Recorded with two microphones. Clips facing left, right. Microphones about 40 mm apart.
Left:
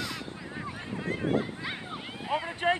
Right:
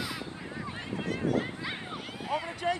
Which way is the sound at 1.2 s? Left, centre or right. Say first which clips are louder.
Left 1 dB; left.